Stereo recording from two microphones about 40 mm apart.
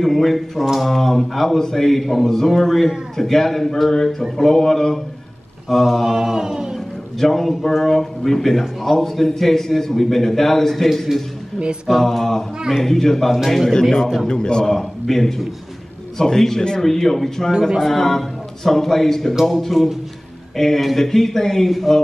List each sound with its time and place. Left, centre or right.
0.0 s speech: centre
6.1 s chant: centre
7.2 s speech: centre
14.2 s a man's voice: centre
14.7 s speech: centre
17.5 s chant: centre
17.8 s speech: centre